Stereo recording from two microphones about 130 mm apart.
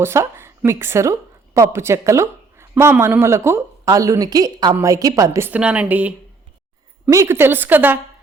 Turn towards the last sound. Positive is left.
turn(degrees=-15)  # may be behind; listen again after turning